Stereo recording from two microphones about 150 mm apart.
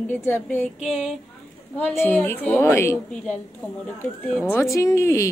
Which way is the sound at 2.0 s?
15° left (ahead or behind).